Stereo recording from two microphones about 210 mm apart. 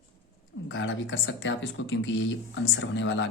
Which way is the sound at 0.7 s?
65° left (ahead or behind).